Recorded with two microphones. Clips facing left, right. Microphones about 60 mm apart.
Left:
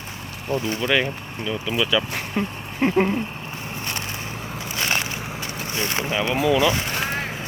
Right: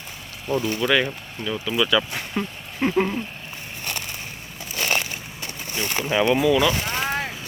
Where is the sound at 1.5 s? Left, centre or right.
Centre.